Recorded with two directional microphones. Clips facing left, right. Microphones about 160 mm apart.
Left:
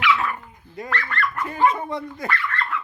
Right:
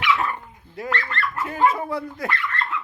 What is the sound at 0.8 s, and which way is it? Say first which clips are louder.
Speech: right 1 dB; 25° right (ahead or behind).